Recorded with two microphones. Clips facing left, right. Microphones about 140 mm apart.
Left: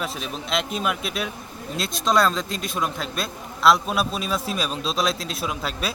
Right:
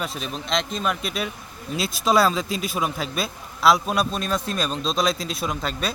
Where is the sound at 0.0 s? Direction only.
Centre (ahead or behind).